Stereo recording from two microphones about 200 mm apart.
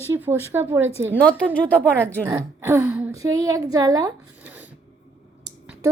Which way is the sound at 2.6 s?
10° right (ahead or behind).